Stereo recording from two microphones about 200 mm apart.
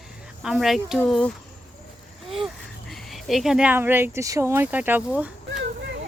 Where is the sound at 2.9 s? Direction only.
Centre (ahead or behind).